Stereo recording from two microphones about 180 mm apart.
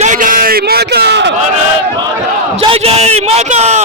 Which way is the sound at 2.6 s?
35° right (ahead or behind).